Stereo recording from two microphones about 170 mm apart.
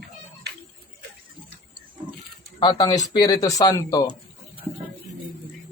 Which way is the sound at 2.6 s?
30° left (ahead or behind).